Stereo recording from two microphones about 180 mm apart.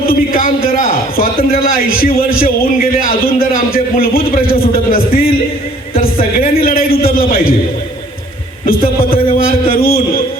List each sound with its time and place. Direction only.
0.0 s a sound: 55° left (ahead or behind)
1.1 s a man's voice: 55° left (ahead or behind)
9.6 s a man's voice: 55° left (ahead or behind)